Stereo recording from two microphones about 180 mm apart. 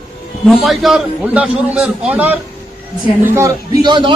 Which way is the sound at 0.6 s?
Centre (ahead or behind).